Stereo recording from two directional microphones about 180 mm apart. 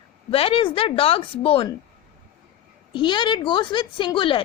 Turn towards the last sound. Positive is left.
turn(degrees=30)  # may be behind; listen again after turning